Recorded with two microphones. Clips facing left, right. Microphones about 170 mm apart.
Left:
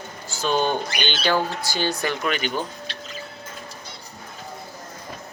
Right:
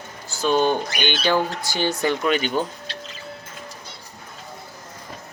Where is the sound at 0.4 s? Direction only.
10° right (ahead or behind).